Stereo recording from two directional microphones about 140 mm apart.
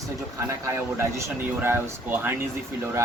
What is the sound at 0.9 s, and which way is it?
Speech, 20° right (ahead or behind).